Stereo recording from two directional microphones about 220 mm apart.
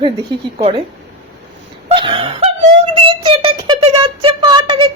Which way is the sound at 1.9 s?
25° right (ahead or behind).